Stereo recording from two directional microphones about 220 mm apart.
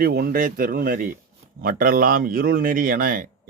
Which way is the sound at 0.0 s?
45° right (ahead or behind).